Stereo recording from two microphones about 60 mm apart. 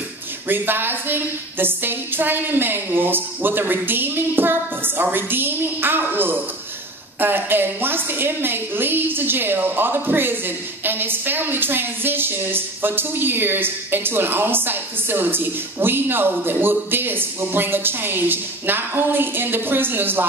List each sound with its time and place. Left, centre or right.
0.5 s a woman's voice: right